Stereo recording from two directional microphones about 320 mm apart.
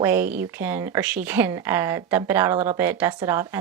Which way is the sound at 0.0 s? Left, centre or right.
Centre.